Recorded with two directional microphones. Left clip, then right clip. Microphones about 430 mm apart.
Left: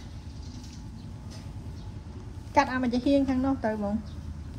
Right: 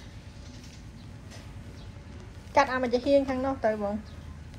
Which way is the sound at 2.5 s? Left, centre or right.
Centre.